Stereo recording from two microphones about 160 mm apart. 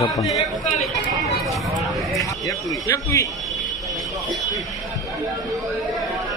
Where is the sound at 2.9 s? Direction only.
20° left (ahead or behind).